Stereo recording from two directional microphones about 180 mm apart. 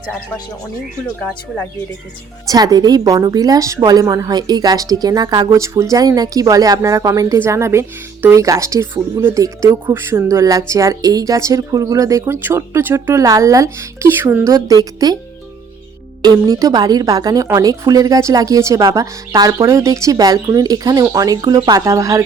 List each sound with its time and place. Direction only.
1.2 s speech: 5° left (ahead or behind)
2.5 s a woman's voice: 20° right (ahead or behind)
16.2 s a woman's voice: 20° right (ahead or behind)